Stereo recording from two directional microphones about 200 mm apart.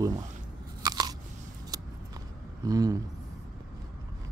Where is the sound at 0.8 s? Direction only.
20° right (ahead or behind).